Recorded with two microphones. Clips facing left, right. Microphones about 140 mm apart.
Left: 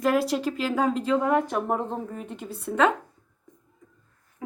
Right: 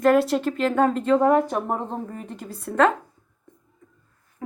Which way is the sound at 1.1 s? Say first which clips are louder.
Right 6 dB; 40° right (ahead or behind).